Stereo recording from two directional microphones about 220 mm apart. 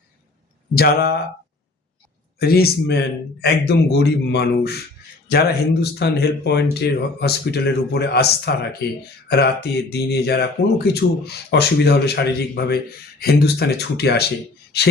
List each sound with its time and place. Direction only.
0.7 s speech: 45° left (ahead or behind)
2.4 s speech: 45° left (ahead or behind)
5.8 s speech: 50° left (ahead or behind)